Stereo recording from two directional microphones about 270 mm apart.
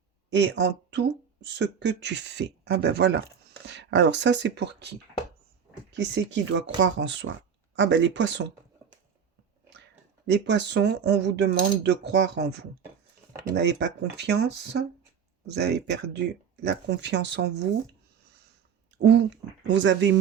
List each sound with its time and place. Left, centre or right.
0.3 s speech: right
6.0 s speech: right
10.2 s speech: right
18.9 s speech: right